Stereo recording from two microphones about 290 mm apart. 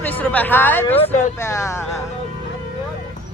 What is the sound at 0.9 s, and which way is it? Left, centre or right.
Speech, left.